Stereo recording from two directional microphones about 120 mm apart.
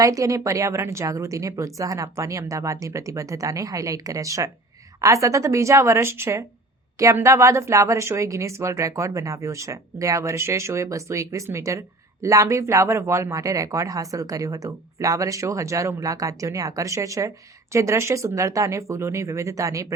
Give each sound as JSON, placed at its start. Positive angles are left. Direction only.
{"t": 0.0, "sound": "speech", "side_deg": -25}